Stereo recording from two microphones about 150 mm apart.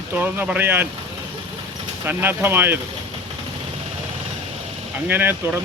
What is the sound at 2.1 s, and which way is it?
Speech, 15° right (ahead or behind).